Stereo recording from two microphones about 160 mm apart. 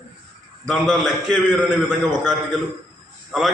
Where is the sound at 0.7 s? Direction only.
5° left (ahead or behind).